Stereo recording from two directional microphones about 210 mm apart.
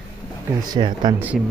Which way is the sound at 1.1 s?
10° right (ahead or behind).